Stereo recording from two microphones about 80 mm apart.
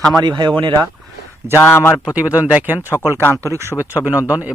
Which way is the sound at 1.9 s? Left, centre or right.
Centre.